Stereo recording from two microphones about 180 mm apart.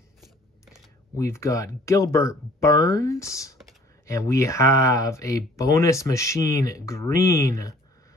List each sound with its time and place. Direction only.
1.1 s speech: 15° left (ahead or behind)